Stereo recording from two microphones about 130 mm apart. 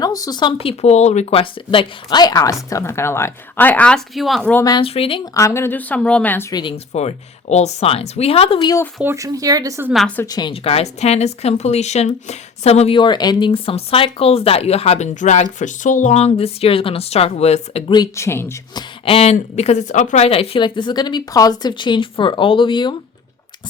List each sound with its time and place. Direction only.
0.0 s speech: 30° left (ahead or behind); by 4.5 s centre (ahead or behind)
4.8 s speech: 45° left (ahead or behind)
5.2 s a woman's voice: 25° left (ahead or behind)
6.5 s speech: 35° left (ahead or behind)
6.9 s speech: 60° left (ahead or behind)
9.0 s speech: 25° right (ahead or behind)
10.2 s speech: 30° left (ahead or behind)
10.5 s speech: 50° left (ahead or behind)
13.0 s speech: 35° left (ahead or behind); by 17.8 s 55° left (ahead or behind)
17.8 s speech: 35° left (ahead or behind)
18.2 s speech: 20° left (ahead or behind)
18.7 s speech: 40° left (ahead or behind)